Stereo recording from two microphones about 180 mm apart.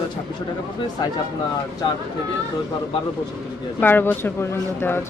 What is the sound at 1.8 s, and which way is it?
Speech, 25° left (ahead or behind).